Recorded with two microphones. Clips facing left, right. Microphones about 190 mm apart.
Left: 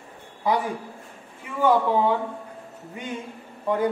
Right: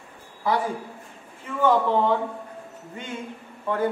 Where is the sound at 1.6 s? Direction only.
10° left (ahead or behind).